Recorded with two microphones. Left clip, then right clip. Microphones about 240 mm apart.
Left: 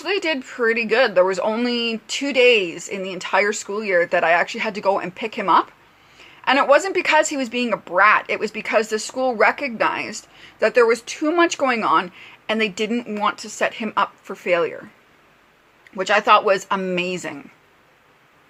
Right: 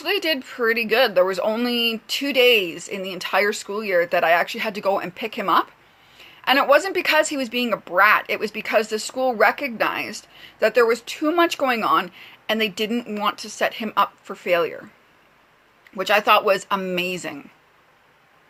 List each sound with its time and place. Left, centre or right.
0.0 s a woman's voice: centre
16.0 s a woman's voice: centre